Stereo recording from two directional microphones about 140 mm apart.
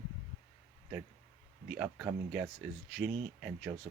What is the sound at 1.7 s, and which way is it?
Speech, 5° right (ahead or behind).